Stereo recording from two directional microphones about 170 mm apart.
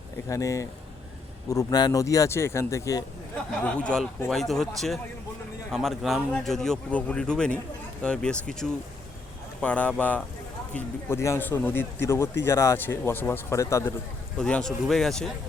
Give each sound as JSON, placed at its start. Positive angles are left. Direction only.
{"t": 0.3, "sound": "speech", "side_deg": 20}
{"t": 3.5, "sound": "a man's voice", "side_deg": 5}
{"t": 14.3, "sound": "a man's voice", "side_deg": 5}